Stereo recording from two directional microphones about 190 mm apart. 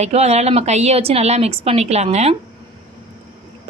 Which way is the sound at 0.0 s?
35° right (ahead or behind).